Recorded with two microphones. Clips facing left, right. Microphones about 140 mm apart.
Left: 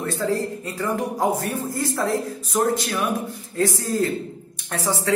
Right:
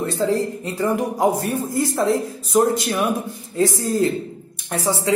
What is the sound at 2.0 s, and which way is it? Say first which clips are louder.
Speech: right 4 dB; 20° right (ahead or behind).